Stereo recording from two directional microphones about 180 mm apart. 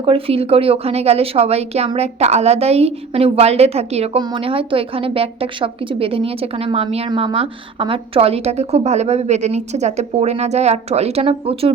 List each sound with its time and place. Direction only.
0.0 s a woman's voice: 30° right (ahead or behind)